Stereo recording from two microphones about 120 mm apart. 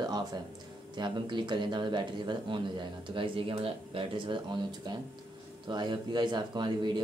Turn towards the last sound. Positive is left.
turn(degrees=-40)  # may be behind; listen again after turning